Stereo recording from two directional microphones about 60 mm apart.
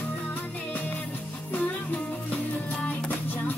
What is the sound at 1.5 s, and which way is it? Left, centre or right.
Music, left.